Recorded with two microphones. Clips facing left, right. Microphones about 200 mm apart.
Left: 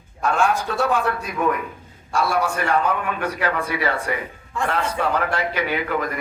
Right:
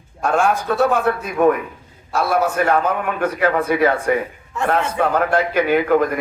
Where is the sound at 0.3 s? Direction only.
50° right (ahead or behind).